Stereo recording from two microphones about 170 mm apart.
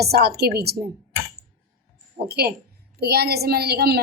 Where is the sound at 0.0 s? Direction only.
65° right (ahead or behind).